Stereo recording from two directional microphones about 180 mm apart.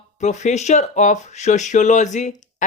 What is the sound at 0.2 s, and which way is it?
Speech, 40° left (ahead or behind).